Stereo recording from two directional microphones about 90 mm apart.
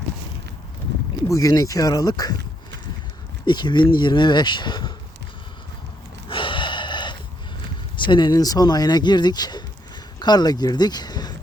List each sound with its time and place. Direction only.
1.3 s speech: 40° left (ahead or behind)
3.4 s speech: 55° left (ahead or behind)
6.2 s gasp: 70° left (ahead or behind)
7.9 s speech: 60° left (ahead or behind)